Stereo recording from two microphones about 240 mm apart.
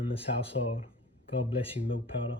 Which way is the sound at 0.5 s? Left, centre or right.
Left.